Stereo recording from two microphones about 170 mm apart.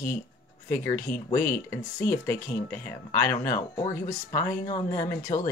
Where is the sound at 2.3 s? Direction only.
15° left (ahead or behind).